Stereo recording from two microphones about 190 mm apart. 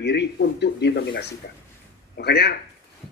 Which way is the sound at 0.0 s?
65° left (ahead or behind).